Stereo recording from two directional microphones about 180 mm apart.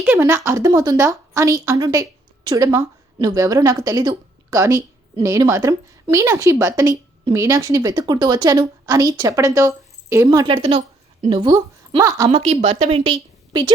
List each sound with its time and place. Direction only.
0.1 s a woman's voice: 15° right (ahead or behind)
12.3 s a woman's voice: 35° right (ahead or behind)